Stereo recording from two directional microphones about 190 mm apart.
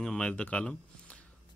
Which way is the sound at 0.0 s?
5° left (ahead or behind).